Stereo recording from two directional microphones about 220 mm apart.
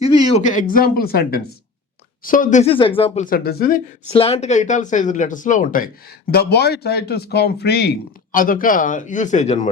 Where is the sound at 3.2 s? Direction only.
45° left (ahead or behind).